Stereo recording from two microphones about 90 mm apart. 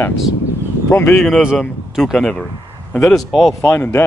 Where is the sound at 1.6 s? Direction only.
Centre (ahead or behind).